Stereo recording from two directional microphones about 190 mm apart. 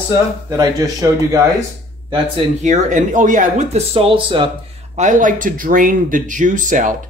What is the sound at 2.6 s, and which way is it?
Speech, 40° right (ahead or behind).